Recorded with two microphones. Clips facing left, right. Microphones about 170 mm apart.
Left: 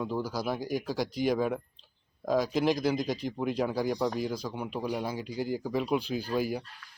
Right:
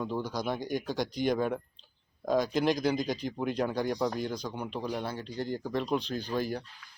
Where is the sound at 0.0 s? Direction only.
5° left (ahead or behind).